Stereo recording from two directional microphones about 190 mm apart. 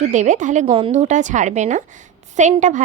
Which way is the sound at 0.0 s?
40° right (ahead or behind).